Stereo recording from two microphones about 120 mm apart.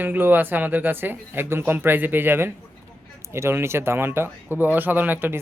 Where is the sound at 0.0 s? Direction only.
15° right (ahead or behind).